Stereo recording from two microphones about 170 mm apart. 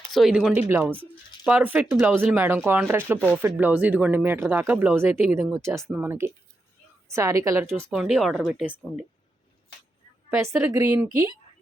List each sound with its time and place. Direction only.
0.1 s speech: 5° right (ahead or behind)
7.9 s speech: 5° right (ahead or behind)
10.3 s speech: 15° right (ahead or behind)